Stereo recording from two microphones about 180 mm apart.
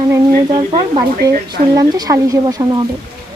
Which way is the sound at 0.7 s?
25° right (ahead or behind).